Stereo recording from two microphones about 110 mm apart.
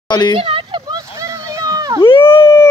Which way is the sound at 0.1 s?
40° left (ahead or behind).